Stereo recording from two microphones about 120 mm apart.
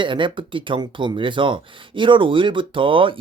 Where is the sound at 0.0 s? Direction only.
40° right (ahead or behind).